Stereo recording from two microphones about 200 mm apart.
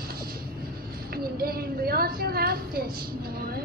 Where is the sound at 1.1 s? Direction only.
50° right (ahead or behind).